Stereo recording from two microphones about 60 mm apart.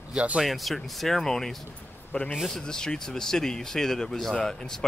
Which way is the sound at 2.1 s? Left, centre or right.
Centre.